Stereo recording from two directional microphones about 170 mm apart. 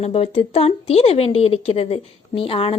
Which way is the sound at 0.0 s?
35° left (ahead or behind).